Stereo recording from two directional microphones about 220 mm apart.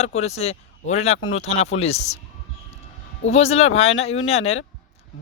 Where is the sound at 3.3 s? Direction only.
30° left (ahead or behind).